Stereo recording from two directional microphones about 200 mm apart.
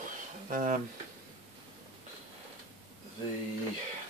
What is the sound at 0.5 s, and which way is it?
Speech, 40° right (ahead or behind).